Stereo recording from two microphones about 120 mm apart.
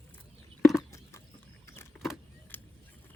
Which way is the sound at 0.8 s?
25° left (ahead or behind).